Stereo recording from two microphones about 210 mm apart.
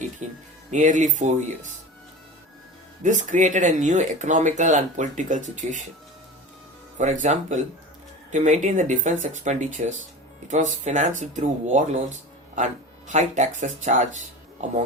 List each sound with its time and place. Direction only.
0.2 s speech: 35° right (ahead or behind)
3.0 s speech: 35° right (ahead or behind)
7.0 s speech: 35° right (ahead or behind)